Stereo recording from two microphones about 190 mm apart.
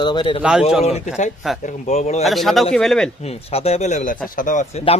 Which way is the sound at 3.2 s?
35° left (ahead or behind).